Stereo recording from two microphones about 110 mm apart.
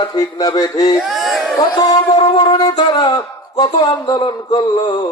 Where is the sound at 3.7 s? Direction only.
40° left (ahead or behind).